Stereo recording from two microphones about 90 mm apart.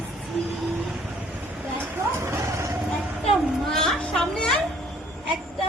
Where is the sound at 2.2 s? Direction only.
30° right (ahead or behind).